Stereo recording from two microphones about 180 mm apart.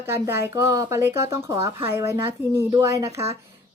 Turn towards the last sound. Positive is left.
turn(degrees=-15)  # may be behind; listen again after turning